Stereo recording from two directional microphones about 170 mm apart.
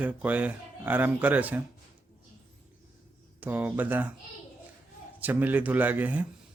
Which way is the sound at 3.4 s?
10° right (ahead or behind).